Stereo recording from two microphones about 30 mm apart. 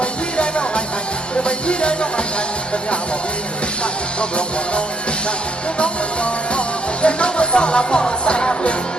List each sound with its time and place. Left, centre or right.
0.0 s music: left
4.2 s music: left
7.0 s music: left